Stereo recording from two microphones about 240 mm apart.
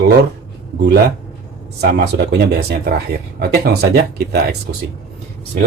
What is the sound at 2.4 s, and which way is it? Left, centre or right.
Speech, right.